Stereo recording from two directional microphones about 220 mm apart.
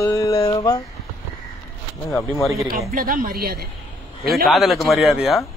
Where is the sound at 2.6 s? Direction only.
40° right (ahead or behind).